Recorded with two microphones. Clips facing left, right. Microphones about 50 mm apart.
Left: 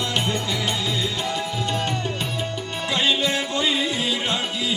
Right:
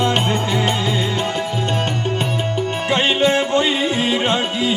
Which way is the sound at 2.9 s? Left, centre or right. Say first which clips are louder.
Right 6 dB; right.